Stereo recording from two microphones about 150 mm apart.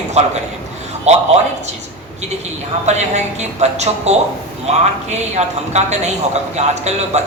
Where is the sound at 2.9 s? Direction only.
50° right (ahead or behind).